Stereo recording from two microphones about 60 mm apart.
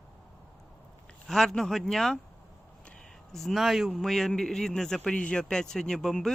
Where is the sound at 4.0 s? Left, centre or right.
Centre.